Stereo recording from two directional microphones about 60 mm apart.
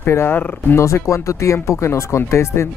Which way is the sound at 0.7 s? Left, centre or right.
Left.